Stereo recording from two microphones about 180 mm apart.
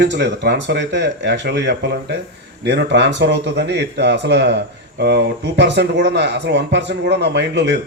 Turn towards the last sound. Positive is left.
turn(degrees=-75)  # may be behind; listen again after turning